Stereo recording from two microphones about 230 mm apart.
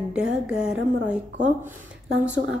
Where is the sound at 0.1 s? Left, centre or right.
Centre.